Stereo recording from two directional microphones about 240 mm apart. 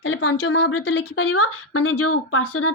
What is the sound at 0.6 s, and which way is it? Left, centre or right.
Speech, left.